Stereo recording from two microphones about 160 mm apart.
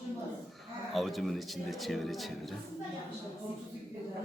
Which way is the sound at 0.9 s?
Centre (ahead or behind).